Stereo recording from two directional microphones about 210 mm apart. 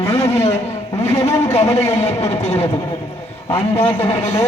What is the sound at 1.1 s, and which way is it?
Speech, 15° left (ahead or behind).